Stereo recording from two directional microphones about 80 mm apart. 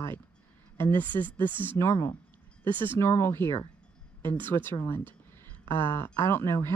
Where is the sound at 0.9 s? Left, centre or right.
Right.